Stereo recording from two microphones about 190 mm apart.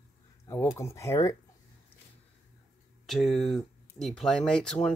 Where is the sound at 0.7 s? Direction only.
15° left (ahead or behind).